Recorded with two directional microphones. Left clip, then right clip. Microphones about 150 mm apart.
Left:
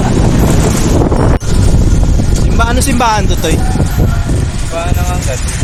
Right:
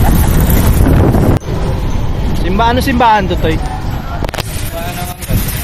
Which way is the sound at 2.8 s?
15° left (ahead or behind).